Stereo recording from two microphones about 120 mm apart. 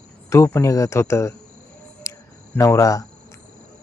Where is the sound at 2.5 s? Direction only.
25° left (ahead or behind).